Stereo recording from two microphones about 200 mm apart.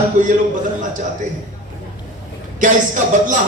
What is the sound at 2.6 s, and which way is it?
Speech, 40° right (ahead or behind).